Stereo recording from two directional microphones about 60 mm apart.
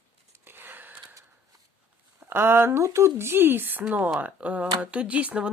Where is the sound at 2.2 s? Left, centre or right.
Right.